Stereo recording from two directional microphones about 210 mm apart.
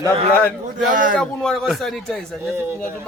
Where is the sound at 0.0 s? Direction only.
5° left (ahead or behind).